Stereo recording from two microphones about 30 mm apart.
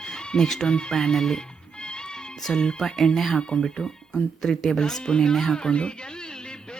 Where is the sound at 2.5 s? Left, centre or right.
Left.